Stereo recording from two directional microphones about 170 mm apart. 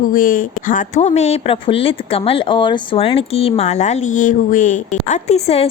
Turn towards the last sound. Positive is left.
turn(degrees=40)  # may be behind; listen again after turning